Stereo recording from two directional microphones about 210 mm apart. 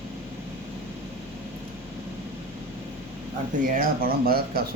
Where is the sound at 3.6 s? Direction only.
45° right (ahead or behind).